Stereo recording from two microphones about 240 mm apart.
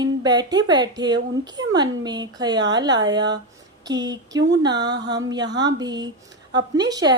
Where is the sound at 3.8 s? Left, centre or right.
Centre.